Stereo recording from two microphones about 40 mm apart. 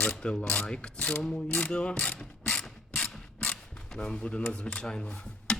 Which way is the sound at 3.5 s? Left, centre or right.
Centre.